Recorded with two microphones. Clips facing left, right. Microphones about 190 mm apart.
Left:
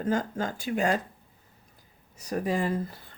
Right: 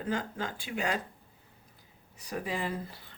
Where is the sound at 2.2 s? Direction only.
45° left (ahead or behind).